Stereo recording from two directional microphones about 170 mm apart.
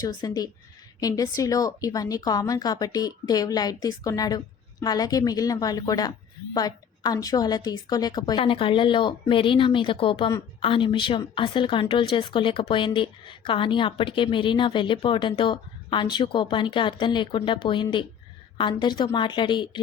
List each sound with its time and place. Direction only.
0.0 s a woman's voice: 25° left (ahead or behind)